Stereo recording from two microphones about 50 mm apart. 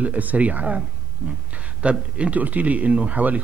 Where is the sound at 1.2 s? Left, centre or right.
Centre.